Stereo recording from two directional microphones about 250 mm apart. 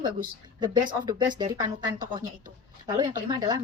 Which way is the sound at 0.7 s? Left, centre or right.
Right.